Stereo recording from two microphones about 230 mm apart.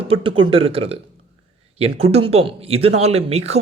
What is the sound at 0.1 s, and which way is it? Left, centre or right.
Speech, right.